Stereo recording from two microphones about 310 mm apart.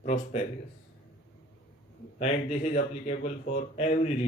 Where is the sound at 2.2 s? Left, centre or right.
Left.